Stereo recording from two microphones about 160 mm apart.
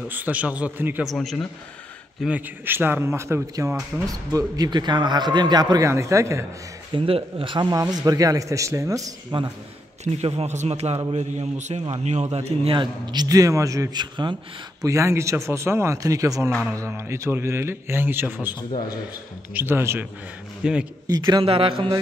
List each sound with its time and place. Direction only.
0.1 s a man's voice: 10° right (ahead or behind)
1.0 s a man's voice: centre (ahead or behind)
2.2 s a man's voice: 10° right (ahead or behind)
6.9 s speech: 35° right (ahead or behind)
10.0 s a man's voice: 45° right (ahead or behind); by 18.6 s 10° right (ahead or behind)
18.6 s a man's voice: 25° left (ahead or behind)
19.5 s a man's voice: 15° right (ahead or behind)
21.1 s speech: 30° right (ahead or behind)